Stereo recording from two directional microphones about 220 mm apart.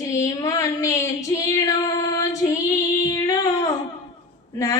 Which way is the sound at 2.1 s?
15° left (ahead or behind).